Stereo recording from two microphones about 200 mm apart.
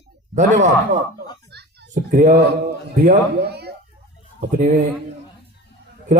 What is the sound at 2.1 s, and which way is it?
Speech, 40° right (ahead or behind).